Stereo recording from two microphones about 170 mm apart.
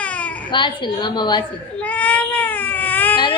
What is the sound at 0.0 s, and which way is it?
Baby cry, 10° left (ahead or behind).